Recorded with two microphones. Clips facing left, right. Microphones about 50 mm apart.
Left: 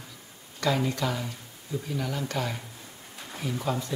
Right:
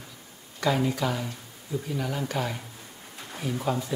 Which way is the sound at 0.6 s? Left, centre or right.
Centre.